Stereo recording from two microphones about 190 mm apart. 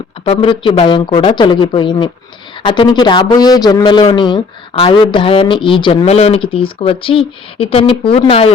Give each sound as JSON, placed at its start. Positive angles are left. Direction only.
{"t": 0.3, "sound": "speech", "side_deg": 25}